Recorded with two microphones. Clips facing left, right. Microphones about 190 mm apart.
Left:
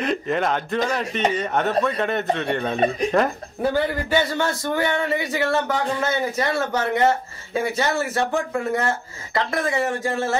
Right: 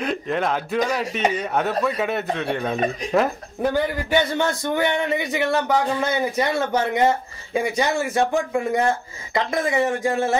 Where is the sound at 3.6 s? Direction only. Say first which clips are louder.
Even; 15° right (ahead or behind).